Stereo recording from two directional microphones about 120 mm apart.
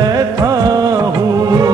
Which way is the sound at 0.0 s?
30° right (ahead or behind).